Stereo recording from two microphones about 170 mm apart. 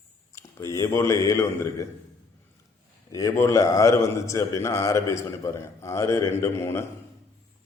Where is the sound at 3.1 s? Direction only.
20° left (ahead or behind).